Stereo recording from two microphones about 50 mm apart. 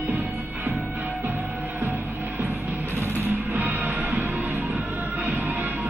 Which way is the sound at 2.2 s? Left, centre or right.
Right.